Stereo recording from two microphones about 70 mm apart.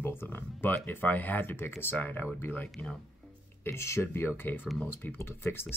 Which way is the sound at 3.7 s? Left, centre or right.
Left.